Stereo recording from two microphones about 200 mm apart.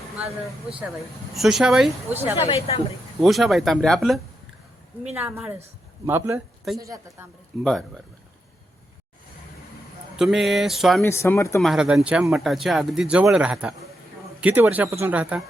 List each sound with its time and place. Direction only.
1.4 s speech: centre (ahead or behind)
2.4 s speech: 30° left (ahead or behind)
3.2 s speech: centre (ahead or behind)
5.1 s speech: 10° right (ahead or behind)
7.6 s speech: 5° left (ahead or behind)
10.2 s speech: centre (ahead or behind)
11.0 s speech: 15° left (ahead or behind)
11.6 s speech: centre (ahead or behind)